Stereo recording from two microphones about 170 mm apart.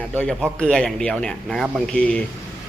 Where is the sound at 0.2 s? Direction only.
5° left (ahead or behind).